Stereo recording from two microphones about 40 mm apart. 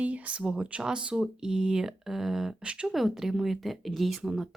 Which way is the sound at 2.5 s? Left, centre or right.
Right.